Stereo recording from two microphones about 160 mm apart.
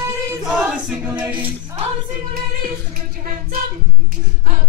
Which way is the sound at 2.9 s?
60° right (ahead or behind).